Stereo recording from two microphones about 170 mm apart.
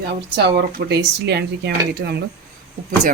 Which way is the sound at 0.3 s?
75° right (ahead or behind).